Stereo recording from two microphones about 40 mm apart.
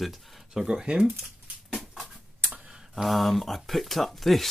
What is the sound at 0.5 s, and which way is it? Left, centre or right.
Speech, centre.